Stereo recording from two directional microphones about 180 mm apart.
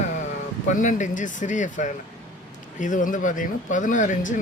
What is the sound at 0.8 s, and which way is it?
Speech, 45° left (ahead or behind).